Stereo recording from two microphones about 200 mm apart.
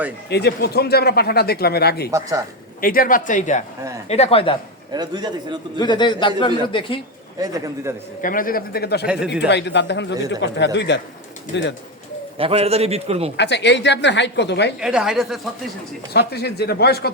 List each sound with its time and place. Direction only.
0.3 s speech: 55° left (ahead or behind)
2.0 s a man's voice: 15° right (ahead or behind)
2.8 s a man's voice: 45° left (ahead or behind); by 4.5 s 30° left (ahead or behind)
4.9 s a man's voice: 20° right (ahead or behind)
5.7 s a man's voice: 20° left (ahead or behind)
7.3 s a man's voice: 15° right (ahead or behind)
8.2 s speech: 45° left (ahead or behind)
9.0 s a woman's voice: 5° right (ahead or behind)
9.5 s speech: 60° left (ahead or behind)
12.4 s a man's voice: 30° right (ahead or behind)
13.3 s speech: 60° left (ahead or behind)
14.8 s a woman's voice: 5° right (ahead or behind)
16.1 s speech: 55° left (ahead or behind)